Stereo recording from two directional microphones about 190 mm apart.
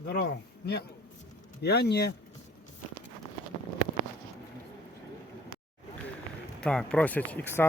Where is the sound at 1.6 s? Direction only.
60° left (ahead or behind).